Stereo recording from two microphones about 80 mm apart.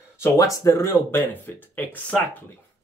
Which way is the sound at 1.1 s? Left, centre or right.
Left.